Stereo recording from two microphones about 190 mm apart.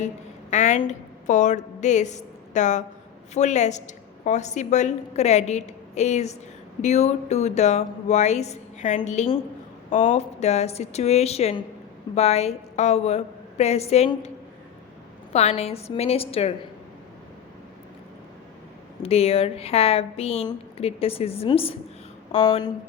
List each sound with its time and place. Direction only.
0.5 s a woman's voice: 40° left (ahead or behind)
15.3 s a woman's voice: 35° left (ahead or behind)
19.0 s a woman's voice: 30° left (ahead or behind)